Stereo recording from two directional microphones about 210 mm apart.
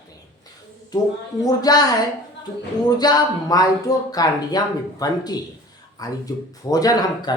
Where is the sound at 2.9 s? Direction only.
20° left (ahead or behind).